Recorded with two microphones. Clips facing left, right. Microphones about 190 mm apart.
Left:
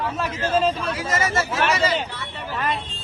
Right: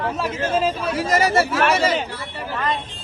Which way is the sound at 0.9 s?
35° right (ahead or behind).